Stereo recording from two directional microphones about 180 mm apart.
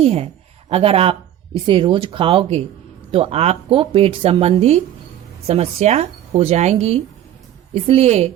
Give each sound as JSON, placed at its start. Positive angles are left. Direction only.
{"t": 0.0, "sound": "speech", "side_deg": -35}